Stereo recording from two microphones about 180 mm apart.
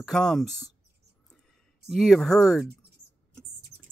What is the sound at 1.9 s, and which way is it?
Speech, centre (ahead or behind).